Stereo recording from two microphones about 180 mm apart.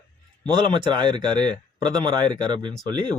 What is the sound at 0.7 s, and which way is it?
Speech, 25° right (ahead or behind).